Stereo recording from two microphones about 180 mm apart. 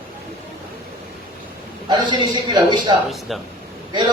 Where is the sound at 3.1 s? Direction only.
Centre (ahead or behind).